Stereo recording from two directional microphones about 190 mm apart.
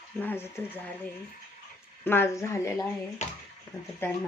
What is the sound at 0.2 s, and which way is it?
Speech, 10° left (ahead or behind).